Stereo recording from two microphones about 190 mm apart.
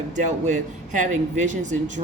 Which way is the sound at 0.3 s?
40° right (ahead or behind).